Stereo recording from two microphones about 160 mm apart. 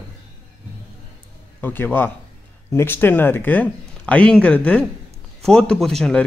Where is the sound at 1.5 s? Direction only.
10° left (ahead or behind).